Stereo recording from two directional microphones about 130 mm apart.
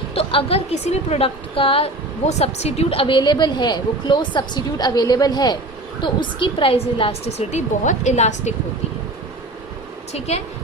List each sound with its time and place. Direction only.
0.1 s a woman's voice: 45° left (ahead or behind); by 8.5 s 60° left (ahead or behind)
10.1 s a woman's voice: 55° left (ahead or behind)